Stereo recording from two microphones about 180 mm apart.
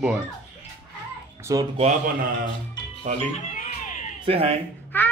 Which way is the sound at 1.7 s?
40° right (ahead or behind).